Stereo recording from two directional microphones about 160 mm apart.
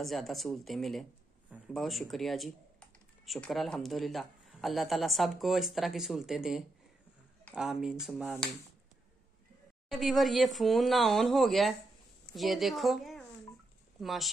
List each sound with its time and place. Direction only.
0.0 s speech: centre (ahead or behind)
9.8 s speech: centre (ahead or behind)